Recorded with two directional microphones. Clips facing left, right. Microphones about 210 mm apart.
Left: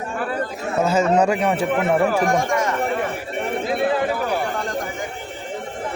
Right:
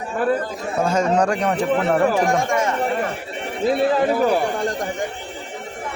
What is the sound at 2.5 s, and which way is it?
Speech, 25° right (ahead or behind).